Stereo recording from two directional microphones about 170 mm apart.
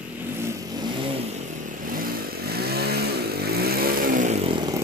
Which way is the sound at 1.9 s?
60° right (ahead or behind).